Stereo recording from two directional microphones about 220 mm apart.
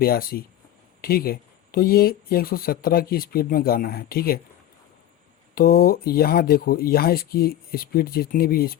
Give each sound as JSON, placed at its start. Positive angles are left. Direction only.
{"t": 0.0, "sound": "speech", "side_deg": 45}
{"t": 5.5, "sound": "speech", "side_deg": 40}